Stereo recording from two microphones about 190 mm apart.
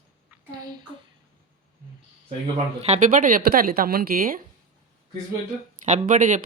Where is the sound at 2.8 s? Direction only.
40° right (ahead or behind).